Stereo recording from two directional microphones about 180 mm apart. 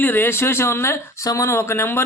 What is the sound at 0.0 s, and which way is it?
Speech, 10° left (ahead or behind).